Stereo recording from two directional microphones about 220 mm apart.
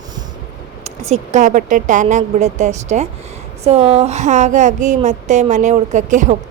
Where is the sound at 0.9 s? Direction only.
30° right (ahead or behind).